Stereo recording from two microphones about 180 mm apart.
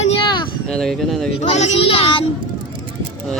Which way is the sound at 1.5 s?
35° left (ahead or behind).